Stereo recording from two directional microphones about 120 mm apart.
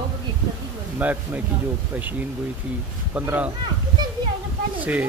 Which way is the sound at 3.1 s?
15° right (ahead or behind).